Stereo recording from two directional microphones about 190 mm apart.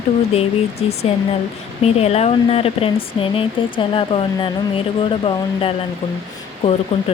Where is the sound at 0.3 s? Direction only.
30° left (ahead or behind).